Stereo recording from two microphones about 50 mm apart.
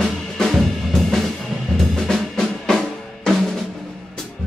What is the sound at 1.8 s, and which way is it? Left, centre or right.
Drum kit, centre.